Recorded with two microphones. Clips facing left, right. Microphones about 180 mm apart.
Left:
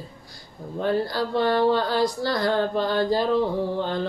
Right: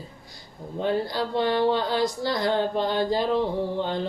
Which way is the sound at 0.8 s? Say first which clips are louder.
Left 2 dB; 20° right (ahead or behind).